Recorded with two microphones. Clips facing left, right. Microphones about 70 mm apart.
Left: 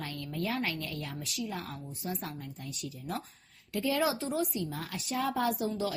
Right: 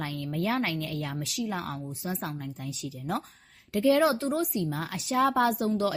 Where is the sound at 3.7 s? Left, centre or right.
Right.